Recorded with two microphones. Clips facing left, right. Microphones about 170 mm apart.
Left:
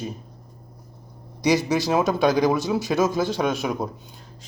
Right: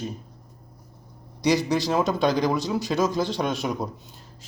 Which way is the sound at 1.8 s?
10° left (ahead or behind).